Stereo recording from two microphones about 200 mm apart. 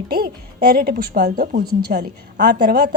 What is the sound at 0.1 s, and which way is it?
A woman's voice, 50° right (ahead or behind).